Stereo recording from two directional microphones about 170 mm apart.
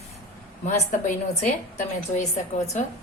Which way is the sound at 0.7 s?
45° left (ahead or behind).